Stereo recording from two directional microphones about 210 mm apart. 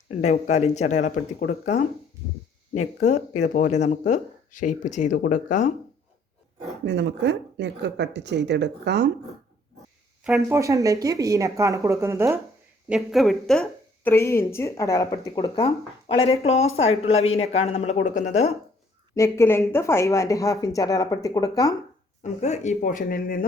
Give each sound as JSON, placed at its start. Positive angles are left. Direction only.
{"t": 0.2, "sound": "speech", "side_deg": 30}
{"t": 6.8, "sound": "a woman's voice", "side_deg": -55}
{"t": 10.2, "sound": "speech", "side_deg": -5}
{"t": 10.6, "sound": "a woman's voice", "side_deg": -15}
{"t": 19.1, "sound": "speech", "side_deg": 15}
{"t": 22.2, "sound": "speech", "side_deg": 35}